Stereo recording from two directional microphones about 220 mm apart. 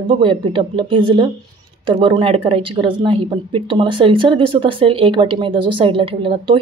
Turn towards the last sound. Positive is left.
turn(degrees=-25)  # may be behind; listen again after turning